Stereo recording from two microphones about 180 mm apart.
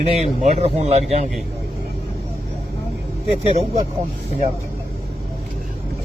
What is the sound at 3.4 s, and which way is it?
Speech, 35° right (ahead or behind).